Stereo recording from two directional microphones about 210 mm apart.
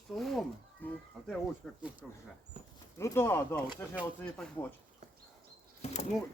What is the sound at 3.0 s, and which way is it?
Speech, 10° left (ahead or behind).